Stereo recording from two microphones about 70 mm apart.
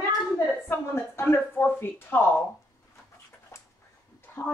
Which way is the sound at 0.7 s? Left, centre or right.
Left.